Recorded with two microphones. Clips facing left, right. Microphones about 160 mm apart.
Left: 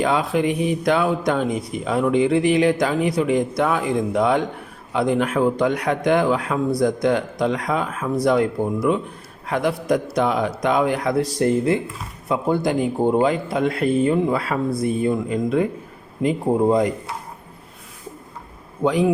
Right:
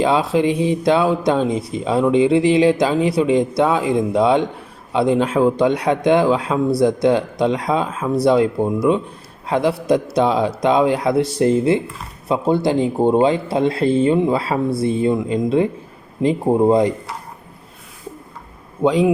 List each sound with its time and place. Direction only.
0.0 s speech: 25° right (ahead or behind)
18.8 s speech: 25° right (ahead or behind)